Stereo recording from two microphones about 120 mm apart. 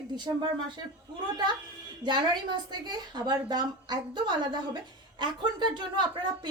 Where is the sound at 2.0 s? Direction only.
40° right (ahead or behind).